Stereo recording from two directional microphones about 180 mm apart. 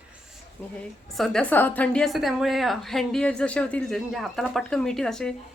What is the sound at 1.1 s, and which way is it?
A woman's voice, centre (ahead or behind).